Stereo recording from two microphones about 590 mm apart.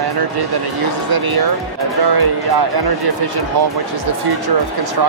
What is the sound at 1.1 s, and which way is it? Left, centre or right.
Speech, right.